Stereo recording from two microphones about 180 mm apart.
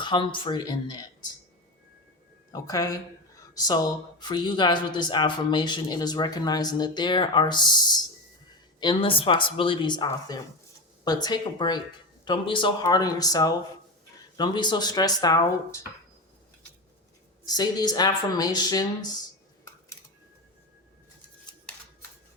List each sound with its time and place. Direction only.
0.0 s speech: 25° left (ahead or behind)
2.5 s speech: 20° left (ahead or behind)
17.4 s speech: 20° left (ahead or behind)
21.5 s a sound: 25° left (ahead or behind)